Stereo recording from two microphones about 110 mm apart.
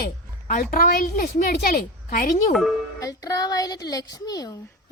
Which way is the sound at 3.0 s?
35° left (ahead or behind).